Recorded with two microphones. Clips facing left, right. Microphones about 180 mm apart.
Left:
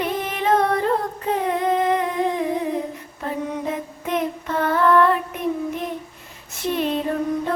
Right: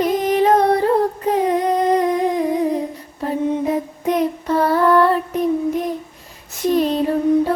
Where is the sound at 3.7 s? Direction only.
35° right (ahead or behind).